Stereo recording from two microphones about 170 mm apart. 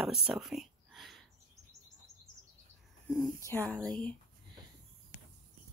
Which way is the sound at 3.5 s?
10° left (ahead or behind).